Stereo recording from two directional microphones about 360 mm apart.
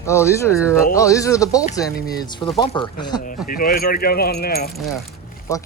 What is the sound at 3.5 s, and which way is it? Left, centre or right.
Speech, left.